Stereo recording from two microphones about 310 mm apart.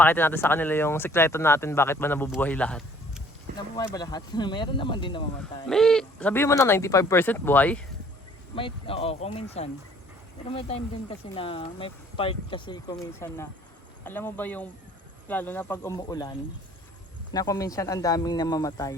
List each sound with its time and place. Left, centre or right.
0.0 s speech: centre
5.6 s speech: centre
8.5 s speech: centre
17.3 s speech: centre